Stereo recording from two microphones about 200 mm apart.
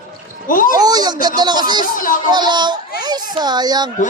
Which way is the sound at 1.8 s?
40° left (ahead or behind).